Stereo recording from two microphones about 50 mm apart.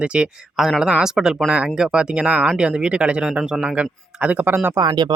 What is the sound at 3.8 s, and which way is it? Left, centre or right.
Speech, right.